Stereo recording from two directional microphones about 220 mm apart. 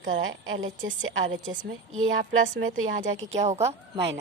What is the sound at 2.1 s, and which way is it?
A woman's voice, 35° right (ahead or behind).